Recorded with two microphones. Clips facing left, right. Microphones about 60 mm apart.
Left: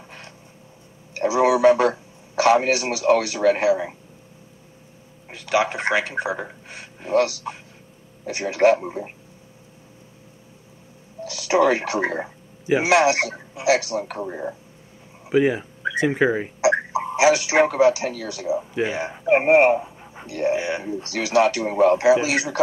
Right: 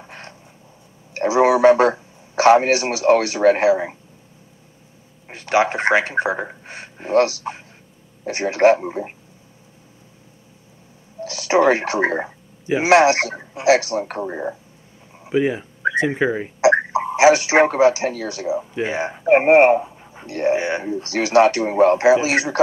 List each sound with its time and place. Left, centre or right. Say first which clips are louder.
1.1 s a sound: right 3 dB; right
5.3 s speech: right 3 dB; right
8.7 s speech: right 2 dB; right
11.3 s speech: right 3 dB; right
15.2 s speech: left 1 dB; centre
17.2 s speech: right 4 dB; right
18.6 s speech: even; centre
18.9 s speech: right 5 dB; right
19.8 s dog: right 2 dB; centre
20.2 s speech: right 3 dB; right